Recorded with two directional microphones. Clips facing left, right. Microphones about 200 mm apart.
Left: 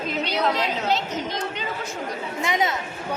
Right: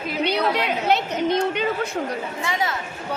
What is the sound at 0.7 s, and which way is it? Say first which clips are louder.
Speech: right 3 dB; 60° right (ahead or behind).